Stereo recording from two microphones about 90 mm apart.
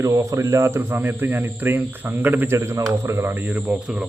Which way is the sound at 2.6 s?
30° right (ahead or behind).